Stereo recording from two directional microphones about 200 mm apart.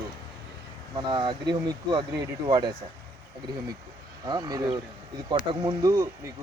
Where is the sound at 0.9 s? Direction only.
20° right (ahead or behind).